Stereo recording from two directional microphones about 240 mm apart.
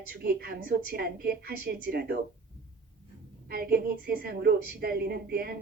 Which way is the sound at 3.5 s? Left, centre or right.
Right.